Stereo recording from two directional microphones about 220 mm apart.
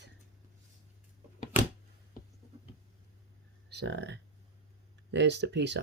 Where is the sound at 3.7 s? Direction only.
50° right (ahead or behind).